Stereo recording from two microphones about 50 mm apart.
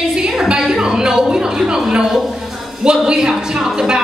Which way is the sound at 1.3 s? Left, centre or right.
Centre.